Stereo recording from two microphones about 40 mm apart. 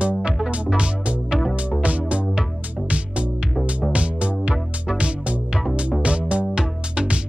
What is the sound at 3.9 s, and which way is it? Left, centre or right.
Music, right.